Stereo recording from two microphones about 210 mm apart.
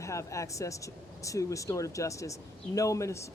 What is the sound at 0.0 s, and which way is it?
Speech, 15° left (ahead or behind).